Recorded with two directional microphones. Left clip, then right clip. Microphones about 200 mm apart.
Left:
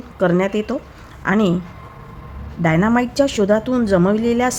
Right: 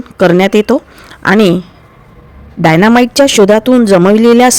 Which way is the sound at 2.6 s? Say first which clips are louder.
Right 10 dB; 50° right (ahead or behind).